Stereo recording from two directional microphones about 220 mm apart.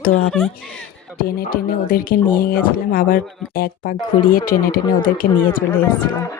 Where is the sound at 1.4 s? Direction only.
40° left (ahead or behind).